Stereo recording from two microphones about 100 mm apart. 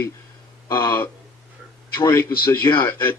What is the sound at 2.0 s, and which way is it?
Speech, 30° left (ahead or behind).